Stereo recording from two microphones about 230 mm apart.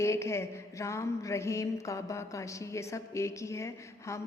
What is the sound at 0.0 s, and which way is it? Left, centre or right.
Mantra, centre.